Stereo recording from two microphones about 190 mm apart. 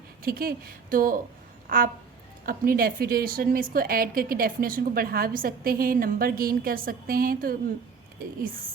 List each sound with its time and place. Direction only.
0.2 s a woman's voice: 50° right (ahead or behind)